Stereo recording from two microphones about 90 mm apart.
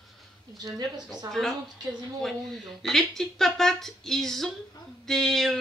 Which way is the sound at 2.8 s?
5° left (ahead or behind).